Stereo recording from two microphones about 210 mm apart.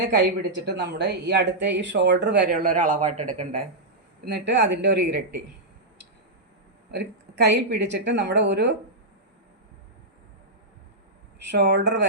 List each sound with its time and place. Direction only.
0.0 s speech: 55° right (ahead or behind); by 3.6 s 35° right (ahead or behind)
4.3 s speech: 55° right (ahead or behind)
6.9 s speech: 50° right (ahead or behind)
11.5 s speech: 50° right (ahead or behind)